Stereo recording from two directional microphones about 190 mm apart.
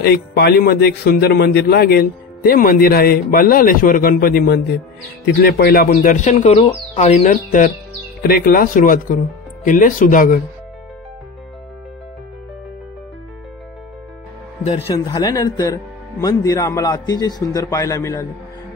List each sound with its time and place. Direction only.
0.0 s a man's voice: 55° left (ahead or behind); by 7.7 s 40° left (ahead or behind)
8.2 s speech: 50° left (ahead or behind)
14.7 s a man's voice: 30° left (ahead or behind)